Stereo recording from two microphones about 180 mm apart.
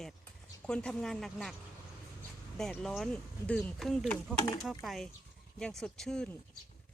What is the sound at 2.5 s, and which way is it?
Speech, 5° left (ahead or behind).